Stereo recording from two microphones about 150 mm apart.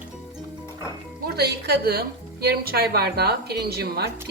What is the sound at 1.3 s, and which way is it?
A woman's voice, 90° right.